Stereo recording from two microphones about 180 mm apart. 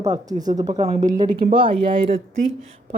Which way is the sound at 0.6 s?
35° right (ahead or behind).